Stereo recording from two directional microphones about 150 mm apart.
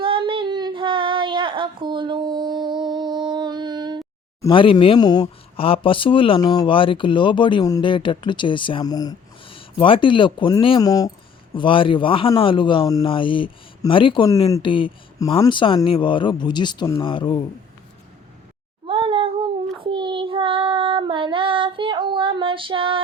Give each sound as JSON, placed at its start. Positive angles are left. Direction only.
{"t": 0.0, "sound": "female singing", "side_deg": -35}
{"t": 4.4, "sound": "speech", "side_deg": 30}
{"t": 5.5, "sound": "speech", "side_deg": 40}
{"t": 18.9, "sound": "a sound", "side_deg": -35}
{"t": 19.8, "sound": "child singing", "side_deg": -35}